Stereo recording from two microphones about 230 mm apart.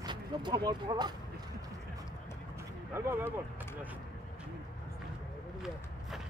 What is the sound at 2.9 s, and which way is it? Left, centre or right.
Speech, centre.